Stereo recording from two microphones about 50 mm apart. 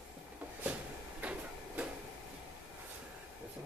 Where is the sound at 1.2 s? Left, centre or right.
Right.